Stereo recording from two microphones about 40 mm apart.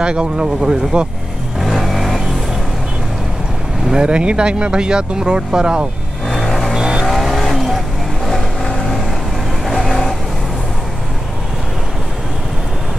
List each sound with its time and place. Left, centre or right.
0.0 s speech: right
1.6 s vehicle: centre
3.9 s speech: right
6.2 s vehicle: centre
6.8 s vehicle: centre
7.1 s vehicle: centre